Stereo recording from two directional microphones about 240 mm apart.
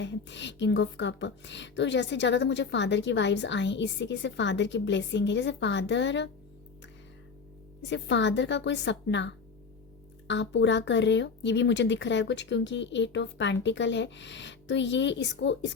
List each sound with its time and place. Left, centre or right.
0.0 s speech: left
7.8 s speech: left